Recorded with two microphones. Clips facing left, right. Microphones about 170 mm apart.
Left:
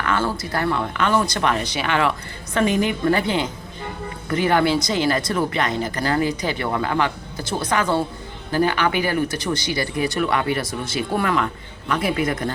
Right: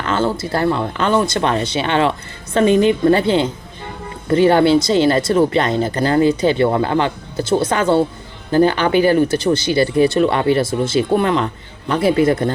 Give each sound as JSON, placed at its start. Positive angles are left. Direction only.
{"t": 0.0, "sound": "speech", "side_deg": -25}